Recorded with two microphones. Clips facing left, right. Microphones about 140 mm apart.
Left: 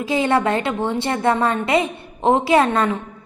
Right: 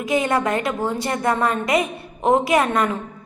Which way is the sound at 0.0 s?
30° left (ahead or behind).